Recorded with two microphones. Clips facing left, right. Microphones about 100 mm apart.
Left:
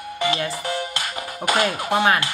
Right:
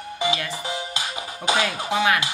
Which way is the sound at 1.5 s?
55° left (ahead or behind).